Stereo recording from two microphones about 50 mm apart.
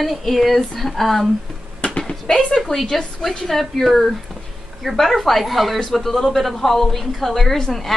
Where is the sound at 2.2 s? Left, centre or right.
Centre.